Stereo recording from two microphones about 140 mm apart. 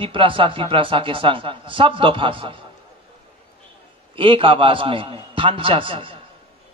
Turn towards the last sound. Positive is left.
turn(degrees=-40)  # may be behind; listen again after turning